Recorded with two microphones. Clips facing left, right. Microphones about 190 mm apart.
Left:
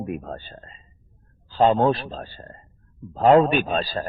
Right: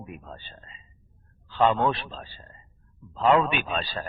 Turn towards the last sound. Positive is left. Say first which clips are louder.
# left 7 dB
turn(degrees=40)  # may be behind; listen again after turning